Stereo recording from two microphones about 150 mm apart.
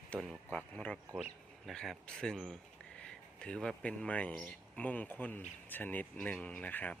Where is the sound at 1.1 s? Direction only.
10° right (ahead or behind).